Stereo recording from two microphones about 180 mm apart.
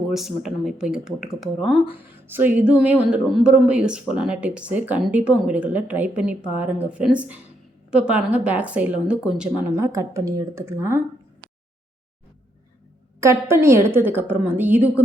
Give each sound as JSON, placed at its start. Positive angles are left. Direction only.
{"t": 0.1, "sound": "speech", "side_deg": 0}
{"t": 13.1, "sound": "speech", "side_deg": -15}